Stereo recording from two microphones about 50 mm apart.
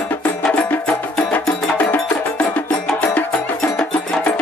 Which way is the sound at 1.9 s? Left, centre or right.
Left.